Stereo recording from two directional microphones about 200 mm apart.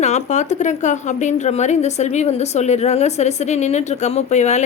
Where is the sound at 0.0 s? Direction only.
35° left (ahead or behind).